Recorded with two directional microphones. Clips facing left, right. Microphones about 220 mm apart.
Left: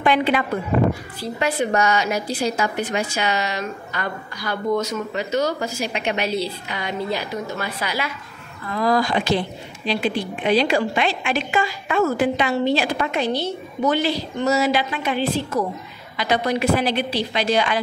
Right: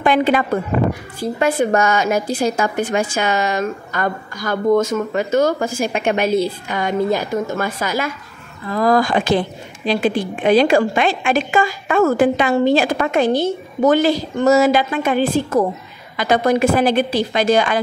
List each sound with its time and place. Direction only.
0.0 s a woman's voice: 45° right (ahead or behind)